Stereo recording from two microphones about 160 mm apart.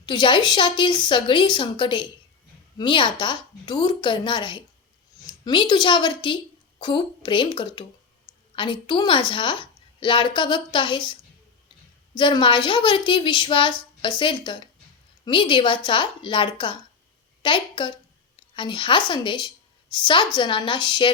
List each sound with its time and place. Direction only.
0.0 s a woman's voice: 30° left (ahead or behind)